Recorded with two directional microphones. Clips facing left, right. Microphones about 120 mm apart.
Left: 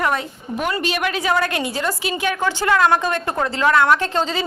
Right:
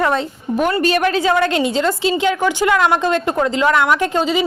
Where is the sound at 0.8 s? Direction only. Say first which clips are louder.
Right 6 dB; 40° right (ahead or behind); by 4.4 s 15° right (ahead or behind).